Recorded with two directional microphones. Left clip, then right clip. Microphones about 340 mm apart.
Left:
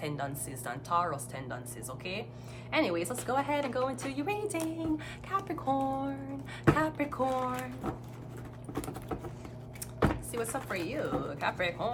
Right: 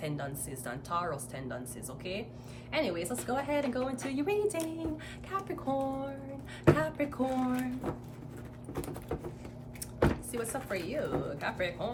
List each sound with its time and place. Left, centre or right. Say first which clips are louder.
0.0 s speech: left 2 dB; centre
10.3 s speech: left 1 dB; centre